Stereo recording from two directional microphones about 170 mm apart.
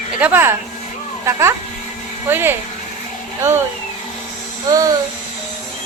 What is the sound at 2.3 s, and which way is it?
Speech, 10° right (ahead or behind).